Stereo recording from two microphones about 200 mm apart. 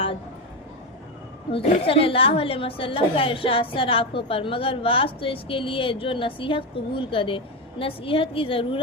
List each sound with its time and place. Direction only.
1.5 s a woman's voice: 30° left (ahead or behind)